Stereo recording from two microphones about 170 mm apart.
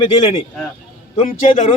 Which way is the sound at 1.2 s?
50° left (ahead or behind).